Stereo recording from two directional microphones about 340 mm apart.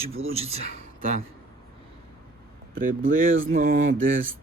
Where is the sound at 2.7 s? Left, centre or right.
Right.